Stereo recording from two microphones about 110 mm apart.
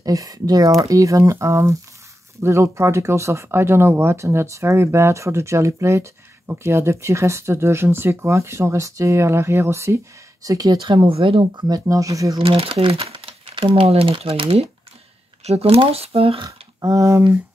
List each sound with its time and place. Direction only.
0.0 s speech: 35° right (ahead or behind)
12.4 s speech: 60° right (ahead or behind)
16.4 s speech: 30° right (ahead or behind)